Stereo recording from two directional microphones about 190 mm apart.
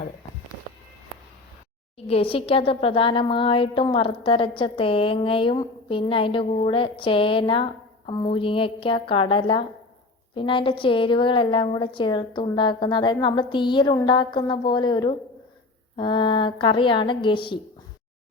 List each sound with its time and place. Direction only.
2.0 s speech: 30° left (ahead or behind)